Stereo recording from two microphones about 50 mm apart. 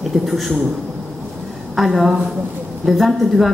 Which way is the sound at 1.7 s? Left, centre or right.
Centre.